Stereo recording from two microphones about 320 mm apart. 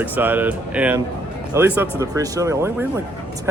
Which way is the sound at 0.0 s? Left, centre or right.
Centre.